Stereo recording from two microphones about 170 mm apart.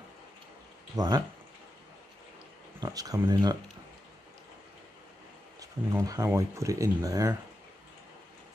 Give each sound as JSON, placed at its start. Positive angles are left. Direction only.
{"t": 0.9, "sound": "speech", "side_deg": -25}
{"t": 2.8, "sound": "speech", "side_deg": -20}
{"t": 5.6, "sound": "speech", "side_deg": -20}